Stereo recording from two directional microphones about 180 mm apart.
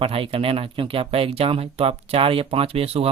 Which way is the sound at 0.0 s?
30° right (ahead or behind).